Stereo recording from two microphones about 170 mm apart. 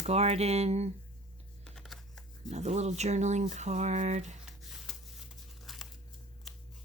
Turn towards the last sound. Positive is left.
turn(degrees=0)  # may be behind; listen again after turning